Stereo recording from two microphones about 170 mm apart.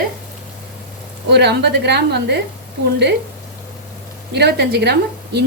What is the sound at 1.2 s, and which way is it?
A woman's voice, 75° right (ahead or behind).